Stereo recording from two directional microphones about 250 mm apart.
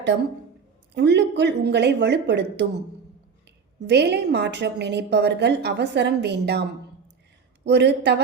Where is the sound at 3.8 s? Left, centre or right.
Right.